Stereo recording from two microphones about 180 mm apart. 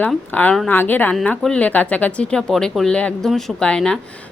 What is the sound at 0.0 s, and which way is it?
A woman's voice, 10° left (ahead or behind).